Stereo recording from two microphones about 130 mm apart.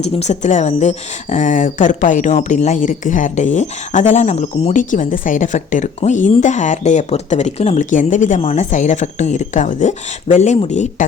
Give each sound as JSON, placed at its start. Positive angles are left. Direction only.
{"t": 0.0, "sound": "a woman's voice", "side_deg": 60}
{"t": 4.8, "sound": "a woman's voice", "side_deg": 90}